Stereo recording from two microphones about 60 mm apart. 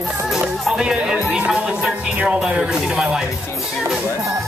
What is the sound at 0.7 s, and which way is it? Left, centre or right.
Speech, centre.